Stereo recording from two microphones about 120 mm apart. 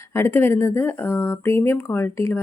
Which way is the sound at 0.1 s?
20° left (ahead or behind).